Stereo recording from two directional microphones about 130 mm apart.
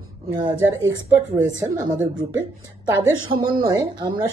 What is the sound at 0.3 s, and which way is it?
A woman's voice, 35° right (ahead or behind).